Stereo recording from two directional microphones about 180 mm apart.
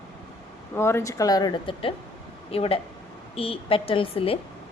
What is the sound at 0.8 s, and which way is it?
A woman's voice, 15° left (ahead or behind).